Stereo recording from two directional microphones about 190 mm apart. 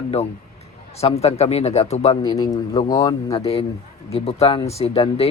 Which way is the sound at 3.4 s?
30° left (ahead or behind).